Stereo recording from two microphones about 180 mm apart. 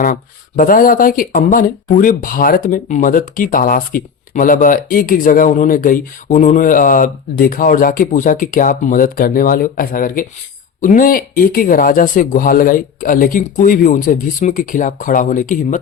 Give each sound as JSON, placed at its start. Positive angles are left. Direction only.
{"t": 0.0, "sound": "speech", "side_deg": 50}